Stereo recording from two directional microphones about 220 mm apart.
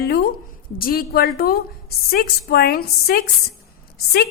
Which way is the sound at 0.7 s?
40° left (ahead or behind).